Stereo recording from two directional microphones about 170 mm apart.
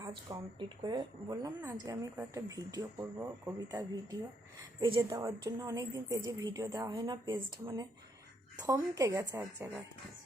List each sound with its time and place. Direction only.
0.3 s a woman's voice: 30° right (ahead or behind)
4.8 s a woman's voice: 30° right (ahead or behind)
8.5 s a woman's voice: 20° right (ahead or behind)